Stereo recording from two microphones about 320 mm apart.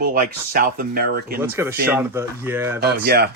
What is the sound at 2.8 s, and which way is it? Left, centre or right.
Speech, right.